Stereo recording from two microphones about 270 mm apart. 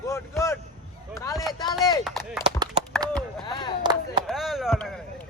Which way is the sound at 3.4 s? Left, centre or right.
Centre.